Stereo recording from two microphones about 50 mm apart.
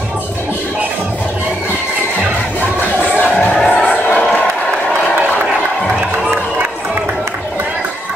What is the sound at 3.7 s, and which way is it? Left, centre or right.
Music, left.